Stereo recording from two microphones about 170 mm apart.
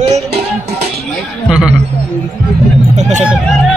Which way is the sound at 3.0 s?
45° right (ahead or behind).